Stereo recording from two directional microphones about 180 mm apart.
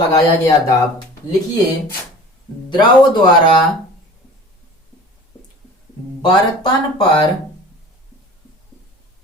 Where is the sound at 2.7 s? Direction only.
25° left (ahead or behind).